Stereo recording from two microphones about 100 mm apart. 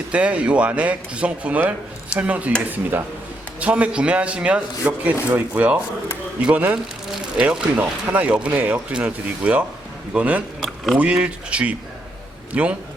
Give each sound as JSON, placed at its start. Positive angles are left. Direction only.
{"t": 0.1, "sound": "speech", "side_deg": -15}
{"t": 3.6, "sound": "speech", "side_deg": -10}